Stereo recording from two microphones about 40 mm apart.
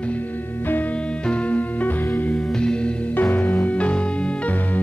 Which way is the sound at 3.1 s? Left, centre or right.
Left.